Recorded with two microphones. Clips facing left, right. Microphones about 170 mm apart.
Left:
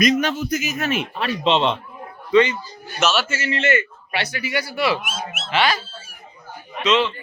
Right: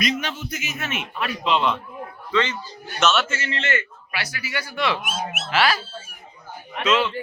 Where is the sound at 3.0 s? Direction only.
Centre (ahead or behind).